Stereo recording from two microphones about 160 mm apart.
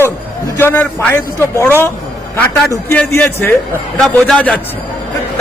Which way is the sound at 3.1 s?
15° left (ahead or behind).